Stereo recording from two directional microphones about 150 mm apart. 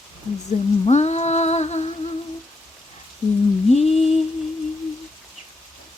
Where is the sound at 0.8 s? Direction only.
45° left (ahead or behind).